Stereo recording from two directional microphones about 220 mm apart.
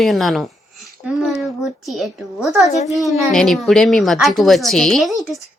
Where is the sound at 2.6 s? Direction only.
30° left (ahead or behind).